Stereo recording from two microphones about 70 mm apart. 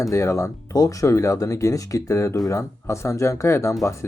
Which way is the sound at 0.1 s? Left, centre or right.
Left.